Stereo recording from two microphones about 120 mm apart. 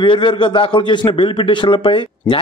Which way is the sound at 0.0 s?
40° left (ahead or behind).